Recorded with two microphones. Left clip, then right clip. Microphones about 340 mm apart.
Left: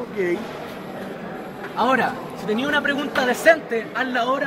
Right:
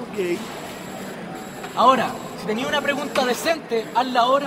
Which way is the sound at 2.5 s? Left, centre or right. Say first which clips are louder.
Left 1 dB; centre.